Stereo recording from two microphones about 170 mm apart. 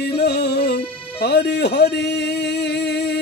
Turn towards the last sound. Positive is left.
turn(degrees=85)